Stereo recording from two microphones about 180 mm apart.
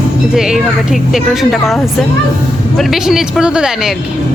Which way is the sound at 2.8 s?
Centre (ahead or behind).